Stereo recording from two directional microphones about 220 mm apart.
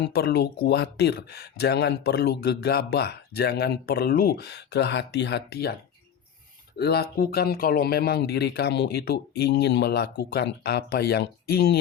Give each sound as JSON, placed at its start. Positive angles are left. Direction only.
{"t": 0.0, "sound": "speech", "side_deg": 50}
{"t": 6.7, "sound": "speech", "side_deg": 45}